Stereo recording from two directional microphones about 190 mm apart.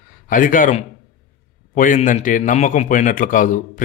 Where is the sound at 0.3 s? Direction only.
45° left (ahead or behind).